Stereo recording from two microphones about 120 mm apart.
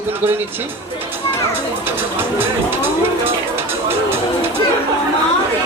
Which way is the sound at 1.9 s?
20° right (ahead or behind).